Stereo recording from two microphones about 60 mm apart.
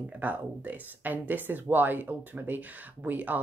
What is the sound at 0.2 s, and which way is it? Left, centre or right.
Speech, right.